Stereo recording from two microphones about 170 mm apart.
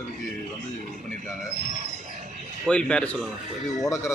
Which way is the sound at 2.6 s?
5° left (ahead or behind).